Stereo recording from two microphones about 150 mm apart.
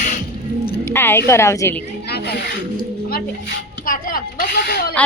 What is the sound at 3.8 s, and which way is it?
Speech, 70° left (ahead or behind).